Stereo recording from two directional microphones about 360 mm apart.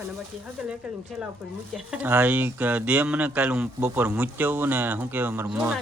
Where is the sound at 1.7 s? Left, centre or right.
Centre.